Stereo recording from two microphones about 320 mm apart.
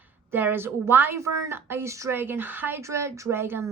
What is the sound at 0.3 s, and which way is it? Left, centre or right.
A woman's voice, centre.